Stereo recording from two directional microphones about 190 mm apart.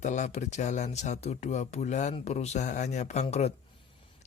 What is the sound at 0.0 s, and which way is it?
Speech, 40° left (ahead or behind).